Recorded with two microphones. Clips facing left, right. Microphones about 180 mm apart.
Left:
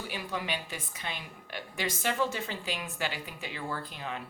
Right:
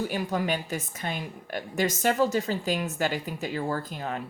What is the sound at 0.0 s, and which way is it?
A woman's voice, 45° right (ahead or behind).